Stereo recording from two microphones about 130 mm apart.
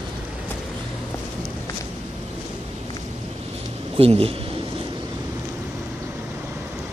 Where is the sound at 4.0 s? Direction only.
45° right (ahead or behind).